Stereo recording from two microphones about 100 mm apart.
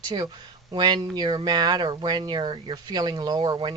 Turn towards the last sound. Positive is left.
turn(degrees=-50)  # may be behind; listen again after turning